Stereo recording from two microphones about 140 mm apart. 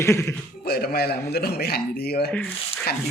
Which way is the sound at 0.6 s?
90° left.